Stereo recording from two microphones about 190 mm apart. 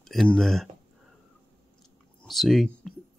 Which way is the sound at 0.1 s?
Centre (ahead or behind).